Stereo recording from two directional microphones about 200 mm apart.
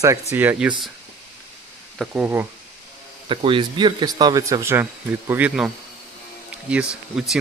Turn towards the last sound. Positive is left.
turn(degrees=-5)  # may be behind; listen again after turning